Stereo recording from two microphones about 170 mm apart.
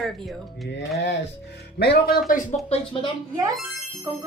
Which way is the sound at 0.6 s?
90° left.